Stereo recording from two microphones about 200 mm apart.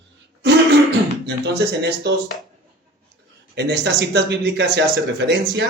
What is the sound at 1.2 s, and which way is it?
Speech, 55° right (ahead or behind).